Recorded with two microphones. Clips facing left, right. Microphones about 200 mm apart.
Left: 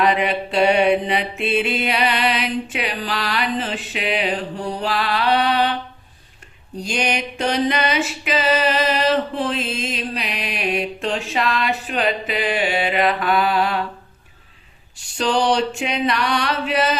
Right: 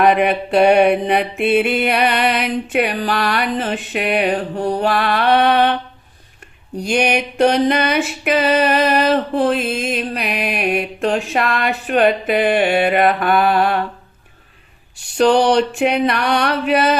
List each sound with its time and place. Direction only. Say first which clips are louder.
0.0 s music: right 5 dB; 55° right (ahead or behind)
6.8 s music: right 6 dB; 60° right (ahead or behind)
15.2 s music: right 6 dB; 60° right (ahead or behind)